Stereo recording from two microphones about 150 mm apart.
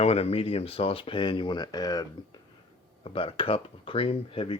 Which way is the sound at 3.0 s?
35° left (ahead or behind).